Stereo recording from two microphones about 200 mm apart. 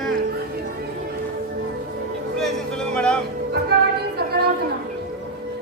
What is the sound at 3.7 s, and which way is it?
Music, 55° right (ahead or behind).